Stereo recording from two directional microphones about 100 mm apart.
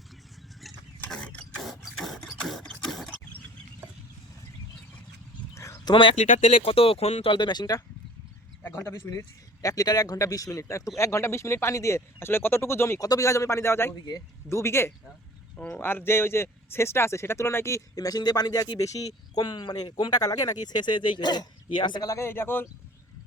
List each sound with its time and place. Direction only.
1.0 s mechanisms: 10° left (ahead or behind)
1.6 s printer: centre (ahead or behind)
5.5 s a sound: 30° left (ahead or behind)
5.9 s speech: 55° left (ahead or behind)
6.6 s speech: 75° left (ahead or behind)
7.3 s speech: 45° left (ahead or behind)
8.6 s speech: 25° left (ahead or behind)
13.9 s speech: 40° left (ahead or behind)
14.5 s speech: 25° left (ahead or behind)
15.5 s speech: 15° left (ahead or behind); by 18.9 s 35° left (ahead or behind)
19.4 s speech: 50° left (ahead or behind)
22.0 s speech: 30° left (ahead or behind)